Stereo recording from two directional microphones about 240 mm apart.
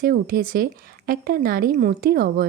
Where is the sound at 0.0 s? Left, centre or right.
Right.